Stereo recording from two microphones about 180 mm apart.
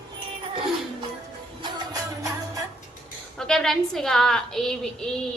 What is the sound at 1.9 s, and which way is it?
Music, 20° right (ahead or behind).